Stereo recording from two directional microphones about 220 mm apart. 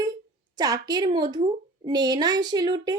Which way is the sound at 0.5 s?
15° right (ahead or behind).